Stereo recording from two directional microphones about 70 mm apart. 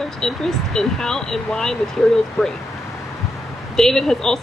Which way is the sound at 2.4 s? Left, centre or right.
Left.